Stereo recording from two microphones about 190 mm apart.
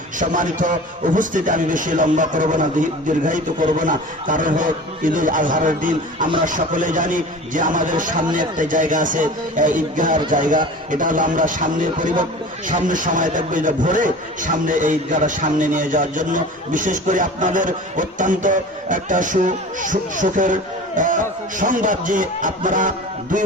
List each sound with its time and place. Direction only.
0.2 s a man's voice: 45° right (ahead or behind)